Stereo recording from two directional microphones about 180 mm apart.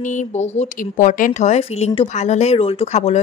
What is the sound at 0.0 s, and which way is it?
A woman's voice, 45° left (ahead or behind).